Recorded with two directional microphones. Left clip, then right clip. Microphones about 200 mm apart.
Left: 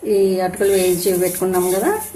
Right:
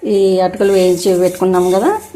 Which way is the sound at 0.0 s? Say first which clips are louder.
Right 4 dB; 35° right (ahead or behind).